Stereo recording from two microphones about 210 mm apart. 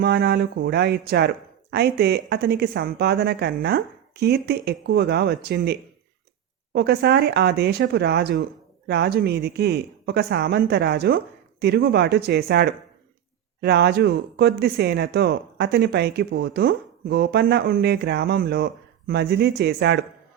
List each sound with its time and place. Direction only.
0.0 s speech: 50° right (ahead or behind)